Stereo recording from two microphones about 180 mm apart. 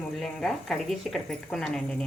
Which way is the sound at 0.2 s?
Centre (ahead or behind).